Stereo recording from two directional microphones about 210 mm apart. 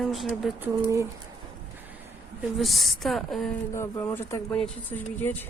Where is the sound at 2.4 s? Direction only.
Centre (ahead or behind).